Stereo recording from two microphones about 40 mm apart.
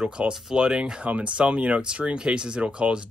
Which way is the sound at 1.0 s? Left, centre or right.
Right.